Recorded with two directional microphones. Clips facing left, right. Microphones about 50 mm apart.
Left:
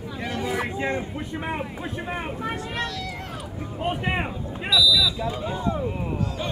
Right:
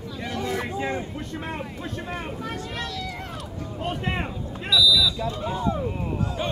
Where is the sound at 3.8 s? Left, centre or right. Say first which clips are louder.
Left 3 dB; centre.